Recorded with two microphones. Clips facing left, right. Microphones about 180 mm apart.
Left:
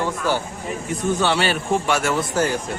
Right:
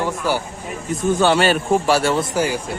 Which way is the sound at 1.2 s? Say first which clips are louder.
Right 7 dB; 45° right (ahead or behind).